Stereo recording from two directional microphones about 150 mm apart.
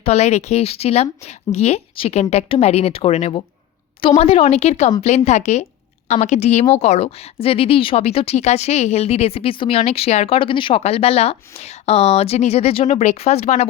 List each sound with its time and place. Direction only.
0.0 s a woman's voice: 45° left (ahead or behind)